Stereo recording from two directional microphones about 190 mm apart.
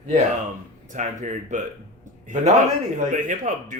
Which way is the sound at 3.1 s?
45° right (ahead or behind).